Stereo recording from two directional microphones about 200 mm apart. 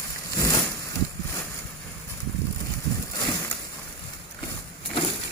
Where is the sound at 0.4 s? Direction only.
15° left (ahead or behind).